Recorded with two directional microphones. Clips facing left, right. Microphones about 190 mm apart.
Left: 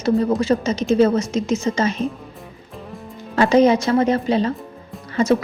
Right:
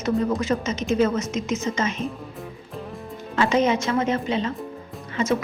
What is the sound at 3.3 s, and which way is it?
A woman's voice, 35° left (ahead or behind).